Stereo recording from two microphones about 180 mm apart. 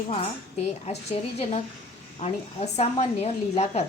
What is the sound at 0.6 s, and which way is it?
Speech, 35° left (ahead or behind).